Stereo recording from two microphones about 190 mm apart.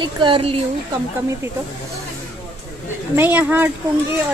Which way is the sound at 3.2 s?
10° right (ahead or behind).